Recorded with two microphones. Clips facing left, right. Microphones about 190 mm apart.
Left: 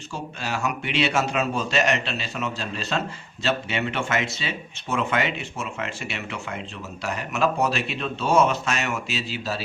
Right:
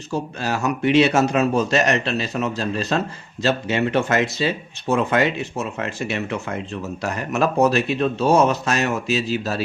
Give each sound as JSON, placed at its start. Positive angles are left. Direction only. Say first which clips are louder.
{"t": 0.1, "sound": "speech", "louder": "right 6 dB", "side_deg": -40}